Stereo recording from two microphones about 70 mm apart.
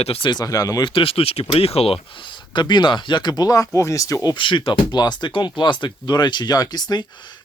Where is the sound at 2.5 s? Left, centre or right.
Left.